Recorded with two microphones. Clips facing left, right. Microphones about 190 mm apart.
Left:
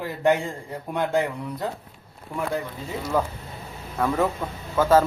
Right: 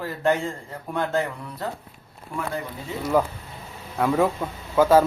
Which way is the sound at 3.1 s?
10° right (ahead or behind).